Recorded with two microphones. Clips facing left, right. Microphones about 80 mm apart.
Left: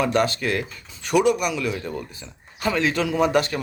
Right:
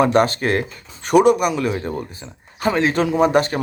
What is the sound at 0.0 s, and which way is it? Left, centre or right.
Speech, right.